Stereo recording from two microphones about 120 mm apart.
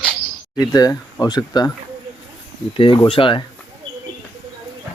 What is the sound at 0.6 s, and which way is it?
Speech, 30° left (ahead or behind).